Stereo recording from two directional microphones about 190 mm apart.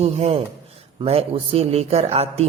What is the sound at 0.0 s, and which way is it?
Speech, 35° right (ahead or behind).